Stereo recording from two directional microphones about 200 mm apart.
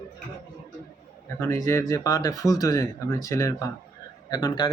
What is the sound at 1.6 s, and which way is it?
Speech, 15° left (ahead or behind).